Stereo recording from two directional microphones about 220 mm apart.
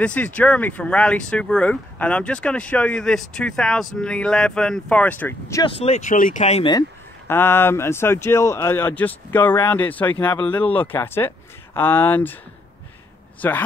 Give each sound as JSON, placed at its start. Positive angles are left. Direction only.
{"t": 0.0, "sound": "speech", "side_deg": 5}
{"t": 5.6, "sound": "speech", "side_deg": 25}
{"t": 7.2, "sound": "speech", "side_deg": 10}
{"t": 13.4, "sound": "speech", "side_deg": 10}